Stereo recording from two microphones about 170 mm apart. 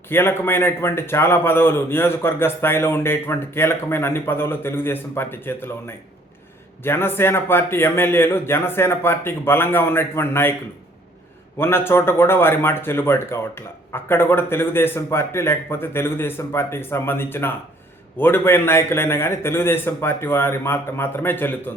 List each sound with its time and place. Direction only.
0.1 s speech: 15° left (ahead or behind)
6.8 s speech: 15° left (ahead or behind)
11.5 s speech: 15° left (ahead or behind)